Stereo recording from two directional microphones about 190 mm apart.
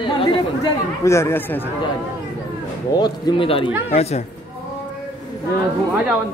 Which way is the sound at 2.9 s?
20° left (ahead or behind).